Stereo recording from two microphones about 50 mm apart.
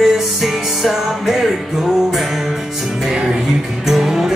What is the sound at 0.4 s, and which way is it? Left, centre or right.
Music, centre.